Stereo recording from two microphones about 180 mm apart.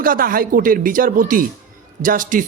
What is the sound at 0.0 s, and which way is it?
A man's voice, 50° right (ahead or behind).